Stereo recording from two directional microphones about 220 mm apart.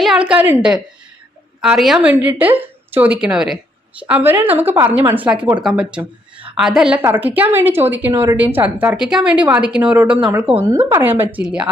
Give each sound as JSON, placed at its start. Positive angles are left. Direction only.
{"t": 0.0, "sound": "a woman's voice", "side_deg": -5}